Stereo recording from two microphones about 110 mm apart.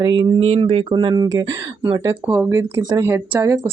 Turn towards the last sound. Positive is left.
turn(degrees=-20)  # may be behind; listen again after turning